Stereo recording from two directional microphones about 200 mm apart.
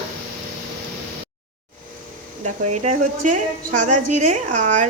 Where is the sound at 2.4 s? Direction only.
35° right (ahead or behind).